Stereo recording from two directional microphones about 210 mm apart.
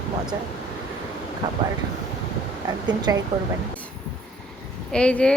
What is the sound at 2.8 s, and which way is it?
Speech, 20° right (ahead or behind).